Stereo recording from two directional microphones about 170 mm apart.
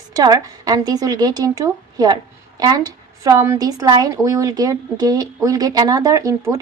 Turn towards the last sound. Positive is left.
turn(degrees=-20)  # may be behind; listen again after turning